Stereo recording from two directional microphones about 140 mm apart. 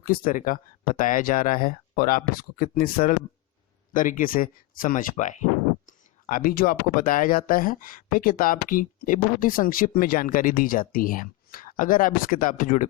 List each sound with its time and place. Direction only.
0.0 s speech: 85° left
3.9 s speech: 70° left (ahead or behind)
6.2 s speech: 80° left